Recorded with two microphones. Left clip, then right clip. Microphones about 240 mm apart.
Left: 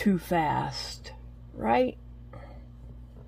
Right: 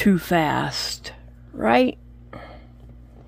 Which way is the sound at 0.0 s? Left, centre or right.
Right.